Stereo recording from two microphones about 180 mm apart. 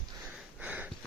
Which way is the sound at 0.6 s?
10° right (ahead or behind).